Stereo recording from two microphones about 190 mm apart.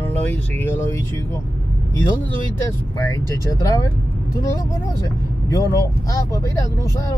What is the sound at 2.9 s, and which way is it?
Speech, 15° left (ahead or behind).